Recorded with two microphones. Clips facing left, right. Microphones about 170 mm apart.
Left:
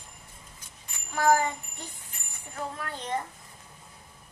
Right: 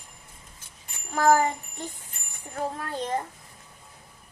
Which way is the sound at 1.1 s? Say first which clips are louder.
Right 3 dB; 50° right (ahead or behind).